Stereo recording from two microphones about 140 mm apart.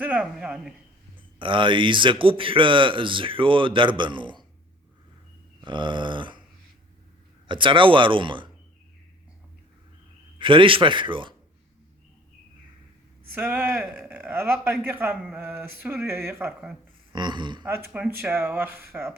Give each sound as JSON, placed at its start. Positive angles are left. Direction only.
{"t": 0.0, "sound": "speech", "side_deg": -10}
{"t": 1.4, "sound": "a man's voice", "side_deg": -35}
{"t": 5.6, "sound": "a man's voice", "side_deg": -35}
{"t": 7.4, "sound": "a man's voice", "side_deg": -35}
{"t": 10.3, "sound": "a man's voice", "side_deg": -35}
{"t": 13.3, "sound": "speech", "side_deg": -10}
{"t": 17.1, "sound": "a man's voice", "side_deg": -35}
{"t": 17.7, "sound": "speech", "side_deg": -15}